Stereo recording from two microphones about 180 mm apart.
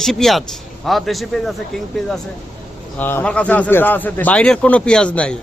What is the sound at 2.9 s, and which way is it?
Speech, 10° left (ahead or behind).